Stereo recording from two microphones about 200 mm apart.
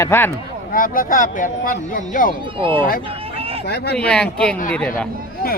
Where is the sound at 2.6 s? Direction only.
25° right (ahead or behind).